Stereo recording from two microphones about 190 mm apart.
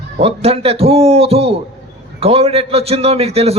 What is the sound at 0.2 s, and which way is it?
A man's voice, 30° right (ahead or behind).